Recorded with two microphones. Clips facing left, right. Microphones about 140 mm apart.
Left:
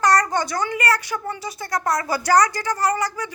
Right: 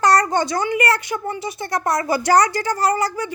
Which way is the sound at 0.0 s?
30° right (ahead or behind).